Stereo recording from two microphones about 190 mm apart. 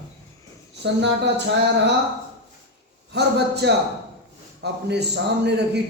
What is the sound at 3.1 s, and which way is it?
A man's voice, 60° right (ahead or behind).